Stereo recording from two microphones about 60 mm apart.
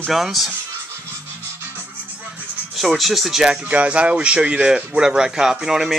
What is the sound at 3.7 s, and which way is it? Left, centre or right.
Speech, right.